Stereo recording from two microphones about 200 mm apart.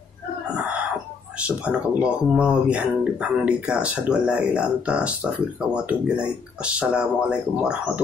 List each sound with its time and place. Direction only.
1.6 s speech: 5° right (ahead or behind)